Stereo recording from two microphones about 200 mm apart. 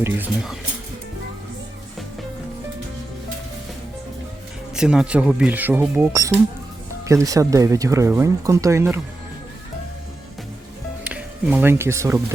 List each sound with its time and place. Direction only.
0.0 s speech: 10° right (ahead or behind)
4.7 s speech: 5° right (ahead or behind)
11.0 s speech: 5° right (ahead or behind)